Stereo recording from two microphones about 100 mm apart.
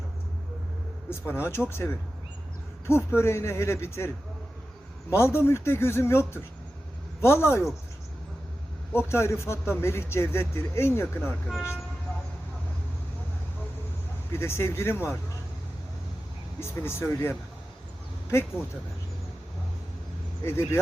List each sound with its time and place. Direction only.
1.1 s a man's voice: 25° left (ahead or behind)
5.1 s a man's voice: 25° left (ahead or behind)
8.9 s a man's voice: 25° left (ahead or behind)
14.3 s a man's voice: 25° left (ahead or behind)
16.6 s a man's voice: 25° left (ahead or behind)
20.4 s a man's voice: 25° left (ahead or behind)